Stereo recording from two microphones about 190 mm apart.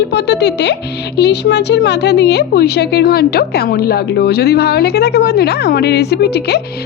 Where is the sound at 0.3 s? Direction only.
60° left (ahead or behind).